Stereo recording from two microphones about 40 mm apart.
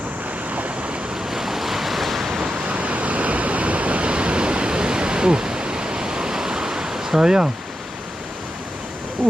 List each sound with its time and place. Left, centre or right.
1.3 s waves: centre
2.6 s waves: right; by 7.5 s centre